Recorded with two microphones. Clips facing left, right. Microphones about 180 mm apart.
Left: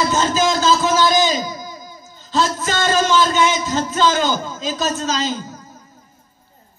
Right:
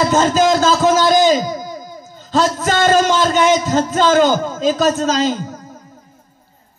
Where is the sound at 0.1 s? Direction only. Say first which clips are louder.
Right 5 dB; 55° right (ahead or behind).